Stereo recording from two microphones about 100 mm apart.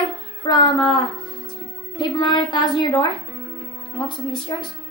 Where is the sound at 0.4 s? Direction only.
50° left (ahead or behind).